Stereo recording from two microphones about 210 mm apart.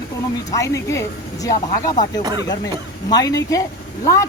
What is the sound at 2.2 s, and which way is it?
Speech, 20° right (ahead or behind).